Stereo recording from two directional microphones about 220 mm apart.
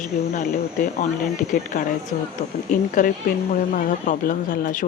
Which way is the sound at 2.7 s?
35° left (ahead or behind).